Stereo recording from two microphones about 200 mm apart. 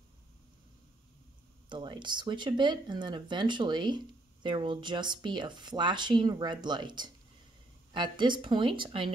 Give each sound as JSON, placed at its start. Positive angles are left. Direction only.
{"t": 1.7, "sound": "speech", "side_deg": -25}